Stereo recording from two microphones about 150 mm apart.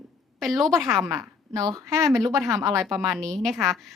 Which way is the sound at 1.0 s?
20° right (ahead or behind).